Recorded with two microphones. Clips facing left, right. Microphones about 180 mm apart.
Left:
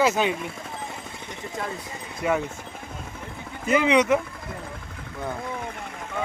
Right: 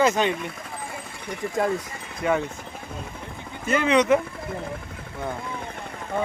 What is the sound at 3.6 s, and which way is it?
Speech, 15° left (ahead or behind).